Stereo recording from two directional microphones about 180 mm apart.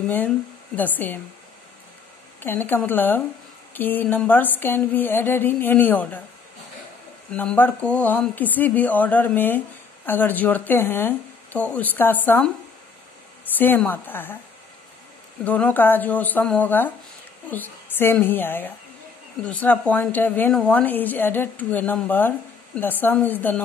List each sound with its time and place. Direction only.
0.7 s a woman's voice: 10° left (ahead or behind)
2.4 s a woman's voice: 10° left (ahead or behind)
7.3 s a woman's voice: 10° left (ahead or behind)
13.6 s a woman's voice: 10° left (ahead or behind)
15.4 s a woman's voice: 10° left (ahead or behind)